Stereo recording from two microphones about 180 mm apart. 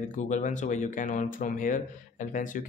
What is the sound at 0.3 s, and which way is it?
Speech, 45° left (ahead or behind).